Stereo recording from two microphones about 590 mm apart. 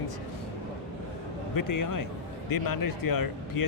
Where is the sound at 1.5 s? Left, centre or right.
Left.